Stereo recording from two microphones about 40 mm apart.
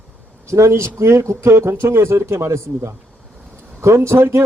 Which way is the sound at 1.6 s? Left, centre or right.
Right.